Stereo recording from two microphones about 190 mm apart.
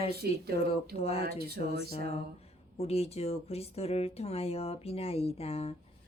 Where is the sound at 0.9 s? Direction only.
30° left (ahead or behind).